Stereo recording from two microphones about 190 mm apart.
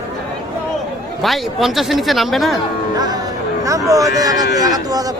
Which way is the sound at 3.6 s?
15° right (ahead or behind).